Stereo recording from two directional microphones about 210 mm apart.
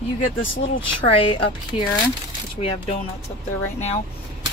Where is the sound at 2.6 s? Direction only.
25° left (ahead or behind).